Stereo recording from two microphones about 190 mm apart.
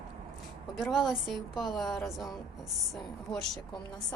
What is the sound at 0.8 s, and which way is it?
A woman's voice, centre (ahead or behind).